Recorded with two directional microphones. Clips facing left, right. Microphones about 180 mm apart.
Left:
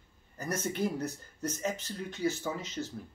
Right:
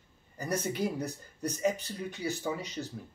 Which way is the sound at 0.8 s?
15° right (ahead or behind).